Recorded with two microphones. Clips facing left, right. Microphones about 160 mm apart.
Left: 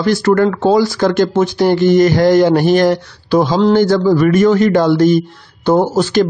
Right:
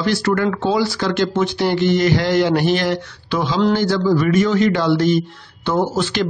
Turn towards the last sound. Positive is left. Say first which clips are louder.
# left 6 dB
turn(degrees=40)  # may be behind; listen again after turning